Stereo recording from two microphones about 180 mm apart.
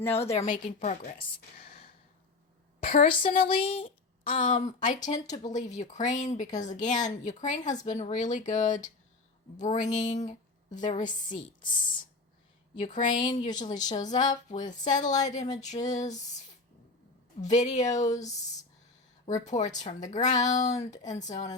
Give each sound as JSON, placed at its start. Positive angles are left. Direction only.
{"t": 0.0, "sound": "speech", "side_deg": 35}
{"t": 2.8, "sound": "a woman's voice", "side_deg": 55}
{"t": 3.5, "sound": "speech", "side_deg": 30}
{"t": 4.4, "sound": "speech", "side_deg": 45}
{"t": 12.8, "sound": "speech", "side_deg": 45}
{"t": 13.4, "sound": "speech", "side_deg": 25}
{"t": 14.0, "sound": "speech", "side_deg": 45}
{"t": 17.4, "sound": "speech", "side_deg": 40}
{"t": 19.5, "sound": "speech", "side_deg": 40}